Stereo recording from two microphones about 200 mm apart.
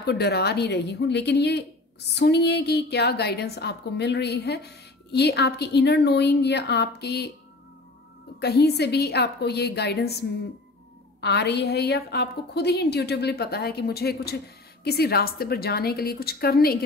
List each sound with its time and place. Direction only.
0.0 s a woman's voice: 55° left (ahead or behind)
8.4 s a woman's voice: 55° left (ahead or behind)